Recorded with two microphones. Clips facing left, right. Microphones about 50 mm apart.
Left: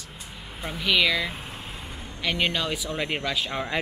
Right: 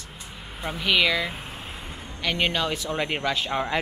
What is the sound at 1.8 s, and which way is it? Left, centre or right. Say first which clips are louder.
Vehicle: right 1 dB; right.